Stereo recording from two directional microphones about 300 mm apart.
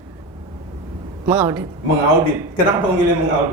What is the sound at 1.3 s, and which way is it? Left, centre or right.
Speech, centre.